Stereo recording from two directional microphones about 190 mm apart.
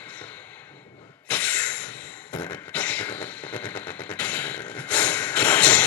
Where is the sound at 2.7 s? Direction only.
5° left (ahead or behind).